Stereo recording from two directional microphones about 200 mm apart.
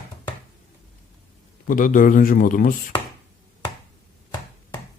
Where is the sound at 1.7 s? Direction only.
45° left (ahead or behind).